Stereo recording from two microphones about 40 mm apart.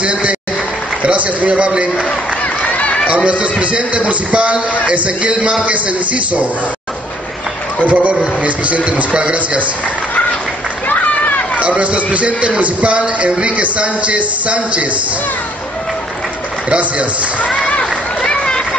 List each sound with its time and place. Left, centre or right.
0.0 s a sound: right
1.0 s speech: right
1.7 s a man's voice: right
3.3 s a man's voice: right
7.8 s speech: right
10.9 s run: left
11.6 s speech: right
16.6 s speech: right
18.2 s a sound: centre